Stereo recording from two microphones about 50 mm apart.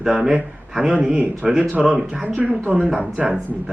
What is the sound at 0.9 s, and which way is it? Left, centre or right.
Speech, right.